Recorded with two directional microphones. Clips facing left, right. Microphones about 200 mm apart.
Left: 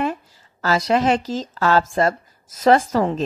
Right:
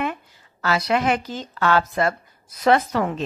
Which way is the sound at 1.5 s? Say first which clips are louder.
Left 1 dB; 35° left (ahead or behind).